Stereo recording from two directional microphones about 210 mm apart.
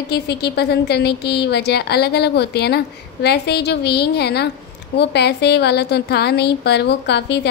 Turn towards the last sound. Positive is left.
turn(degrees=55)  # may be behind; listen again after turning